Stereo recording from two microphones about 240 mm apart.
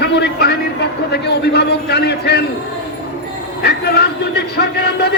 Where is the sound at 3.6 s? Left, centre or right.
Left.